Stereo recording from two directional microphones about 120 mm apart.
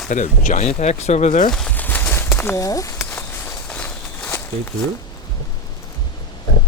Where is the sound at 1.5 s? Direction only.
5° left (ahead or behind); by 3.1 s 25° left (ahead or behind).